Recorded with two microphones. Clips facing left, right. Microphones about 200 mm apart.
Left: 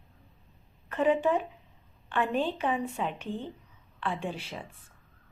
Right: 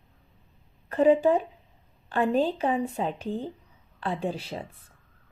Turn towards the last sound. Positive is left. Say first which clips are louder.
# right 5 dB
turn(degrees=-40)  # may be behind; listen again after turning